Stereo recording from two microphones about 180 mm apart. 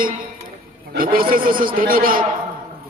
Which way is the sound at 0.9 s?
55° right (ahead or behind).